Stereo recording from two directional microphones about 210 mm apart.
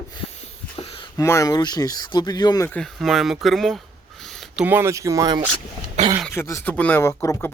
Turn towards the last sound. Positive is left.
turn(degrees=10)  # may be behind; listen again after turning